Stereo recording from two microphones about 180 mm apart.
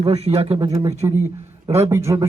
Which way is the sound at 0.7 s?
20° right (ahead or behind).